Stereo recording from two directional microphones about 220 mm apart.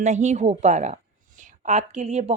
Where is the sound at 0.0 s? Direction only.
30° right (ahead or behind).